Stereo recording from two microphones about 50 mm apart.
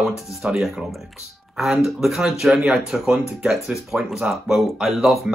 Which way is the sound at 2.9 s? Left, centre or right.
Centre.